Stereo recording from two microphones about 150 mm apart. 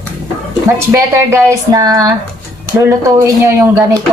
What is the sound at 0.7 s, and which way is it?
Speech, 20° right (ahead or behind).